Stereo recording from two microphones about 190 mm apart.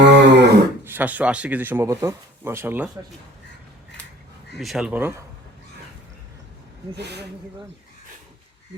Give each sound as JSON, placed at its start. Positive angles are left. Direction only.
{"t": 0.0, "sound": "a sound", "side_deg": -65}
{"t": 0.9, "sound": "speech", "side_deg": -10}
{"t": 4.5, "sound": "speech", "side_deg": 0}
{"t": 6.9, "sound": "speech", "side_deg": -60}